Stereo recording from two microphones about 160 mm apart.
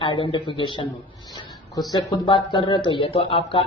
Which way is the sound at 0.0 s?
30° left (ahead or behind).